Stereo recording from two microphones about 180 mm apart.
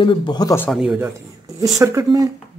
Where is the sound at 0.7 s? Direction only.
5° right (ahead or behind).